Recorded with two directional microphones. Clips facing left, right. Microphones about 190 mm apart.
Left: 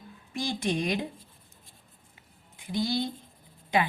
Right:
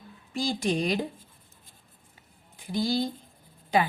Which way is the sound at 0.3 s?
35° right (ahead or behind).